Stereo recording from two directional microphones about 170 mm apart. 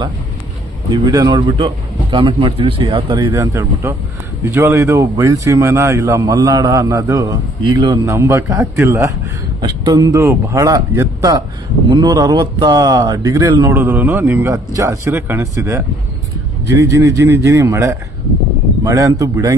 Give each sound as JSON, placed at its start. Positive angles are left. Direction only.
{"t": 0.9, "sound": "speech", "side_deg": -25}